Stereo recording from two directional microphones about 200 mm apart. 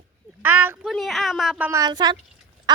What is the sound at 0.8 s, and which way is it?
Speech, centre (ahead or behind).